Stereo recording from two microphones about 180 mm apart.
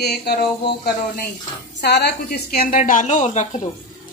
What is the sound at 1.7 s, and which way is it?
Speech, 70° left (ahead or behind).